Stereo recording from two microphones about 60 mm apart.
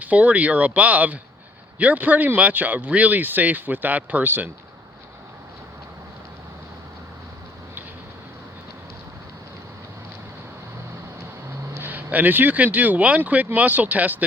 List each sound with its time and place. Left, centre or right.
0.0 s speech: right
11.7 s a sound: right
12.1 s speech: right